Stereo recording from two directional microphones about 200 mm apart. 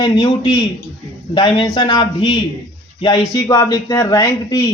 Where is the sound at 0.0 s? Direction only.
25° left (ahead or behind).